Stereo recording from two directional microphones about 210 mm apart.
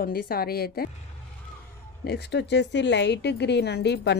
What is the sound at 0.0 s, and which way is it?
Speech, 45° left (ahead or behind).